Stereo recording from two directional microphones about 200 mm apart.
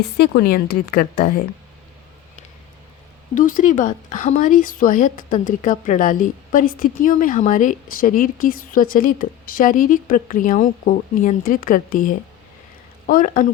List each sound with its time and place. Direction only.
0.2 s speech: 50° left (ahead or behind)
3.3 s a woman's voice: 40° left (ahead or behind)